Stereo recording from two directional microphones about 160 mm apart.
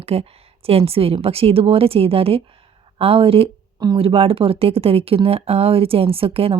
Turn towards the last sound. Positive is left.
turn(degrees=-35)  # may be behind; listen again after turning